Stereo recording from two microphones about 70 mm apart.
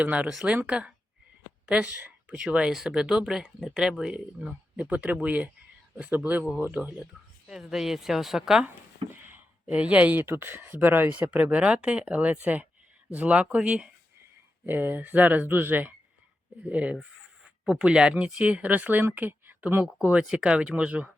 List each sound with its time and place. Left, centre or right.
0.0 s speech: right
9.1 s a sound: right
10.2 s speech: right; by 13.9 s centre
14.7 s speech: right
20.0 s speech: centre